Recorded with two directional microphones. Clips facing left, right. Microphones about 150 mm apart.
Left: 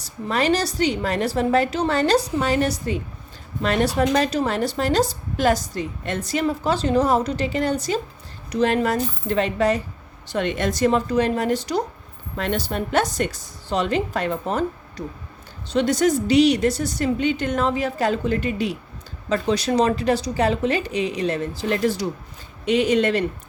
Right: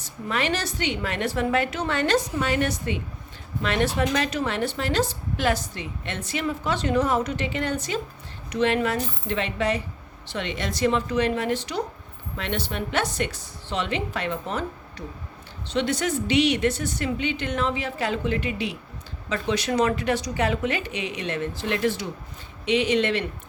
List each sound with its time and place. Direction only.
0.0 s a woman's voice: 35° left (ahead or behind)